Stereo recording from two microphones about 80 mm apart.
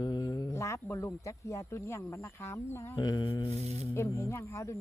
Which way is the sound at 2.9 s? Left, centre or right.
Left.